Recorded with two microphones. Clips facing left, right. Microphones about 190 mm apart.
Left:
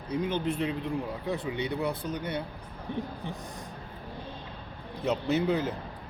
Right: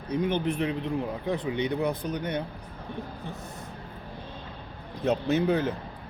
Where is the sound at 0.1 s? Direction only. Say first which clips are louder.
Right 3 dB; 20° right (ahead or behind).